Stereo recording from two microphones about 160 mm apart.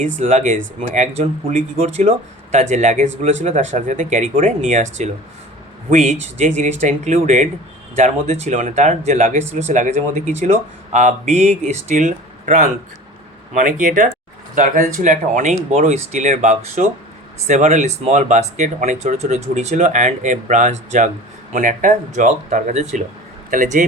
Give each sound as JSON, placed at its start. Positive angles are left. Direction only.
{"t": 0.0, "sound": "speech", "side_deg": -45}